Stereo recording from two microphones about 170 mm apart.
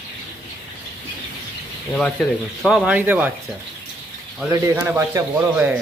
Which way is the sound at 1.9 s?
5° left (ahead or behind).